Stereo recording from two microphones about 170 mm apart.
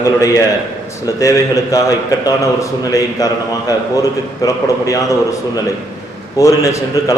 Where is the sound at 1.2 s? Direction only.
20° left (ahead or behind).